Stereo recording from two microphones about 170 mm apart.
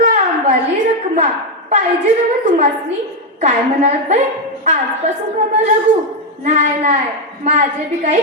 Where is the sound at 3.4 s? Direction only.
45° right (ahead or behind).